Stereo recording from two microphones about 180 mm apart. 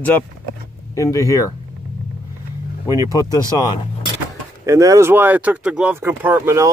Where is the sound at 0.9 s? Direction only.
20° left (ahead or behind).